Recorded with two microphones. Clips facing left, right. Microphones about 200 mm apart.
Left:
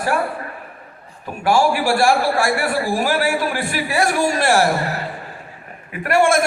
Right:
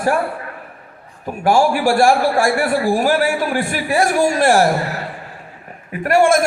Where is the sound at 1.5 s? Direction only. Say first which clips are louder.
Right 2 dB; 50° right (ahead or behind).